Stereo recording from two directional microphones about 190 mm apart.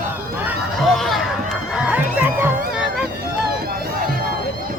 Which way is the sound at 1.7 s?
5° right (ahead or behind).